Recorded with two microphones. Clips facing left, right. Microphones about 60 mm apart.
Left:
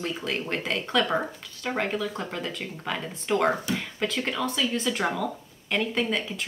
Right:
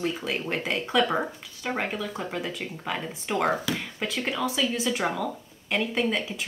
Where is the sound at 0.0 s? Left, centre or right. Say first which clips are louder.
Right 1 dB; centre.